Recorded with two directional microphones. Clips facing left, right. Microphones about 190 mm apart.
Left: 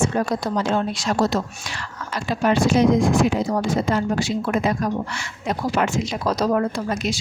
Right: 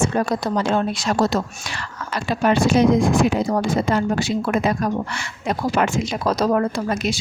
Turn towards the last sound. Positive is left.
turn(degrees=-60)  # may be behind; listen again after turning